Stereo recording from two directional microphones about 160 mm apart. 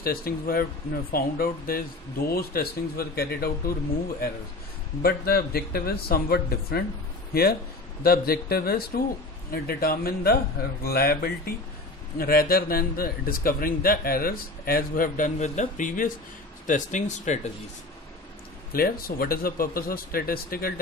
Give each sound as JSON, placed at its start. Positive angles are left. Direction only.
{"t": 0.0, "sound": "speech", "side_deg": 70}
{"t": 5.0, "sound": "a man's voice", "side_deg": 75}
{"t": 18.7, "sound": "speech", "side_deg": 65}